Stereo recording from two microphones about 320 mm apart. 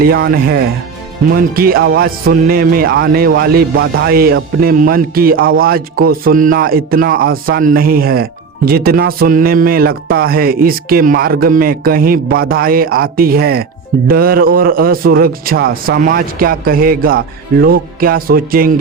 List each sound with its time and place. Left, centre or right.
0.0 s speech: right